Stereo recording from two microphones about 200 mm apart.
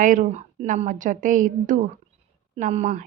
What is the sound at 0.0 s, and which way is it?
A woman's voice, 40° right (ahead or behind).